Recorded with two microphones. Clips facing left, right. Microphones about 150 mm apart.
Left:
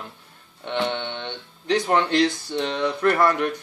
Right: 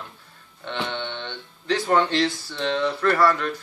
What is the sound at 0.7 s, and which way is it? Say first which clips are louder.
Speech: left 4 dB; 15° left (ahead or behind).